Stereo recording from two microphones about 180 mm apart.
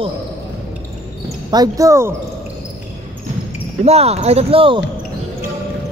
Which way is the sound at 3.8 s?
35° right (ahead or behind).